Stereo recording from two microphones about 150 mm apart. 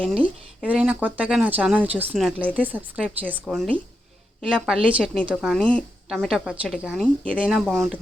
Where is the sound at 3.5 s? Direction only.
Centre (ahead or behind).